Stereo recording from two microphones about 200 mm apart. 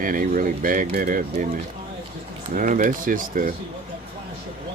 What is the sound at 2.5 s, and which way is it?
Speech, 40° right (ahead or behind).